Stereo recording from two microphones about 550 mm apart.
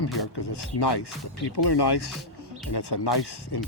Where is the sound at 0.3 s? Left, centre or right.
Left.